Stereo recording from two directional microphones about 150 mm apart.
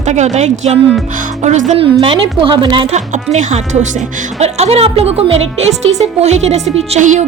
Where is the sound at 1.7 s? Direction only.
40° right (ahead or behind).